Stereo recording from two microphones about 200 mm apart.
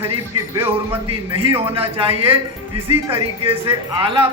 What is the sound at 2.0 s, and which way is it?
A man's voice, 30° right (ahead or behind).